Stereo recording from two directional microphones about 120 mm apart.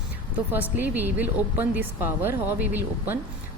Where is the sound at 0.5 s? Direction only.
15° right (ahead or behind).